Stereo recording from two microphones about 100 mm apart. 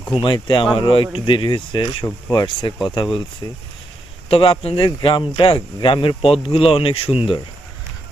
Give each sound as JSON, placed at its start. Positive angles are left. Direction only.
{"t": 0.1, "sound": "speech", "side_deg": 55}
{"t": 3.4, "sound": "speech", "side_deg": 35}
{"t": 4.3, "sound": "speech", "side_deg": 65}